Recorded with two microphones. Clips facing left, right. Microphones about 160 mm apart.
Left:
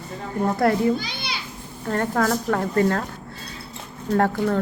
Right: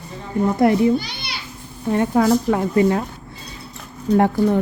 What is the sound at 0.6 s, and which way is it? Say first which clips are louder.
Speech: right 4 dB; 20° right (ahead or behind).